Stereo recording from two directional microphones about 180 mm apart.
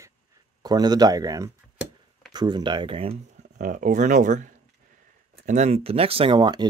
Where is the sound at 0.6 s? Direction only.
20° right (ahead or behind).